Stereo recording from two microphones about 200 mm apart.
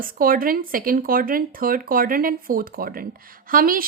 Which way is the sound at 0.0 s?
45° right (ahead or behind).